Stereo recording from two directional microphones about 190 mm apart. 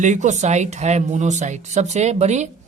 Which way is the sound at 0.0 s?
40° right (ahead or behind).